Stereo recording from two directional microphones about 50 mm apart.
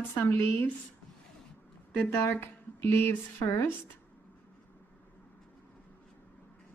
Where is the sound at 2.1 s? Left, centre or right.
Left.